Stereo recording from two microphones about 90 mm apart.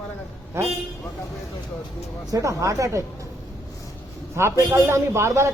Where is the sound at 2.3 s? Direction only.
35° right (ahead or behind).